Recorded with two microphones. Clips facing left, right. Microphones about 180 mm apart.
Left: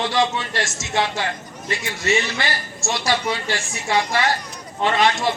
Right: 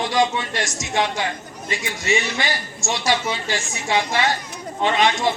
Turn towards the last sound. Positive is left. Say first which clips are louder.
# even
turn(degrees=-15)  # may be behind; listen again after turning